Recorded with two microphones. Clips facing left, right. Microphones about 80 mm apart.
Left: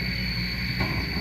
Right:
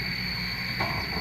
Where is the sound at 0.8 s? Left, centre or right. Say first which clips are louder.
Even; right.